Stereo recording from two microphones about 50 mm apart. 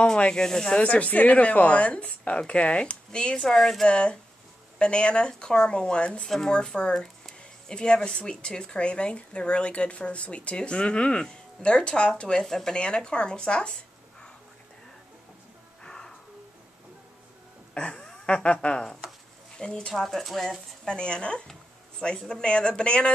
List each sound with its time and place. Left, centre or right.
0.0 s speech: centre
0.7 s speech: left; by 3.9 s centre
3.9 s speech: centre
6.2 s speech: centre
15.8 s music: centre
17.7 s a sound: left
18.0 s speech: left
19.9 s speech: centre
20.8 s speech: centre